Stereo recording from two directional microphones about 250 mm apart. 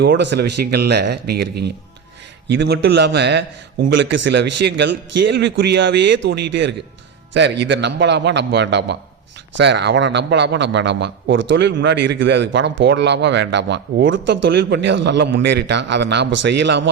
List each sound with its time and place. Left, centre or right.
0.0 s a man's voice: right